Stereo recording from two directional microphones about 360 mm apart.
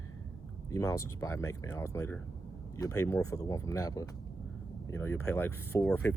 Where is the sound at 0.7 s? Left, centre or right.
Centre.